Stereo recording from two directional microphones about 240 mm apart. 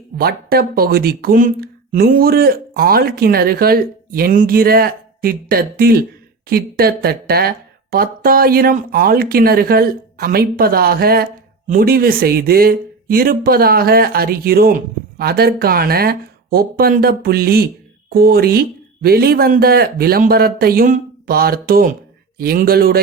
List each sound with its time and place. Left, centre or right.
0.2 s speech: right